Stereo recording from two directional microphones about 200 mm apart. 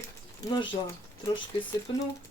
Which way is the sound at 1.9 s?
25° left (ahead or behind).